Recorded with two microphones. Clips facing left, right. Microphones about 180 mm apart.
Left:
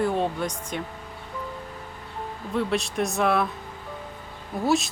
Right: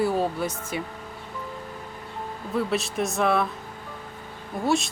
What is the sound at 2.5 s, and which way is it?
Speech, centre (ahead or behind).